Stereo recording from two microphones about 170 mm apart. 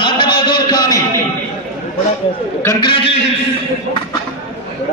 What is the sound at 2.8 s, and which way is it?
Speech, 30° left (ahead or behind).